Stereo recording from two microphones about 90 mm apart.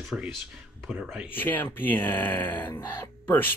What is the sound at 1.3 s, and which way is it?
Speech, 20° left (ahead or behind).